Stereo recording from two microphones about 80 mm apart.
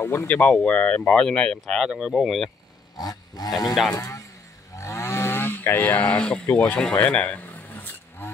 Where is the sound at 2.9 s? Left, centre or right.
Left.